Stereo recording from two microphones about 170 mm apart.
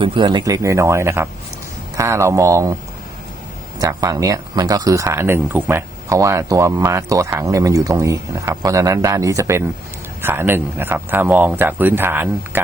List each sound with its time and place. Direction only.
0.0 s speech: 30° right (ahead or behind)
3.8 s speech: 20° right (ahead or behind)